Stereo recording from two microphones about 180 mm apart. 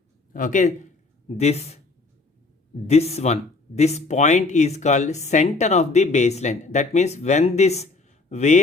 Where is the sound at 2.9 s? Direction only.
35° left (ahead or behind).